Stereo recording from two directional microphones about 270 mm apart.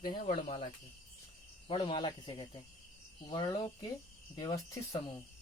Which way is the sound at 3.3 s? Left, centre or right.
Centre.